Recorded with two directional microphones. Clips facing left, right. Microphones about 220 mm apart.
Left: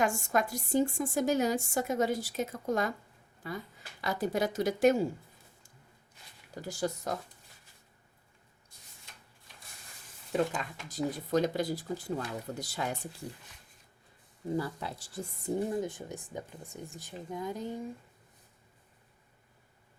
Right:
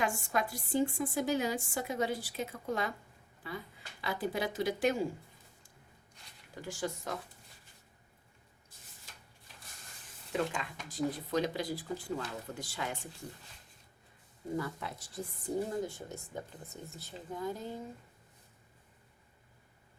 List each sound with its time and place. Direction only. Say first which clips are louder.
0.0 s a woman's voice: left 4 dB; 45° left (ahead or behind)
6.5 s speech: left 4 dB; 40° left (ahead or behind)
10.3 s a woman's voice: left 4 dB; 40° left (ahead or behind)
14.5 s a woman's voice: left 3 dB; 30° left (ahead or behind)